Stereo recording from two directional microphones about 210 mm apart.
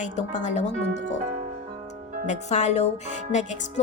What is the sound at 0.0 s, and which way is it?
Speech, 35° left (ahead or behind).